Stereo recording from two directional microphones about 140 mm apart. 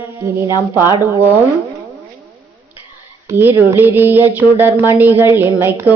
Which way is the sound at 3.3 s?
15° right (ahead or behind).